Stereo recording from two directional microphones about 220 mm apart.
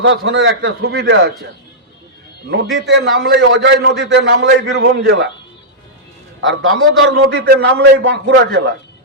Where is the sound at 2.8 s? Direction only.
50° right (ahead or behind).